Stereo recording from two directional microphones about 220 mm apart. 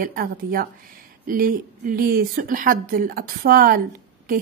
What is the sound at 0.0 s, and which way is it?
A woman's voice, 40° right (ahead or behind).